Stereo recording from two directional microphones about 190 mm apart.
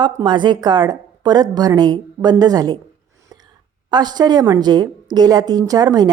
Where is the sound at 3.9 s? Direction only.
20° right (ahead or behind).